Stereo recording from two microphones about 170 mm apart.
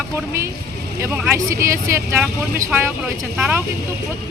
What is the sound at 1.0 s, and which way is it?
Speech, 15° right (ahead or behind).